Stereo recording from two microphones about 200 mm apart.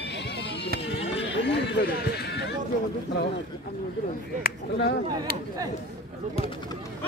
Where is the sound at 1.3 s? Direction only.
60° left (ahead or behind).